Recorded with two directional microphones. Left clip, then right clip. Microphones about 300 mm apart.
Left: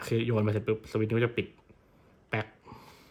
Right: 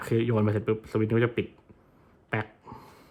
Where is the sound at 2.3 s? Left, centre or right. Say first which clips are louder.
Right 2 dB; centre.